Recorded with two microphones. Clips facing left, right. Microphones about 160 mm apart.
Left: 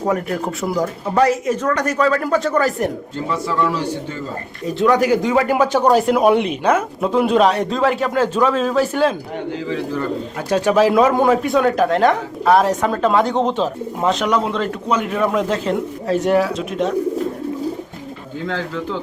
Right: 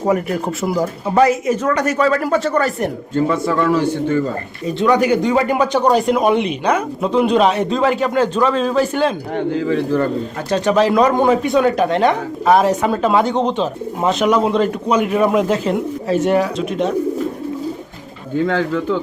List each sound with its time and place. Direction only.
0.0 s speech: 5° right (ahead or behind)
3.2 s a man's voice: 55° right (ahead or behind)
4.6 s speech: centre (ahead or behind)
9.3 s a man's voice: 50° right (ahead or behind)
10.5 s speech: 5° left (ahead or behind)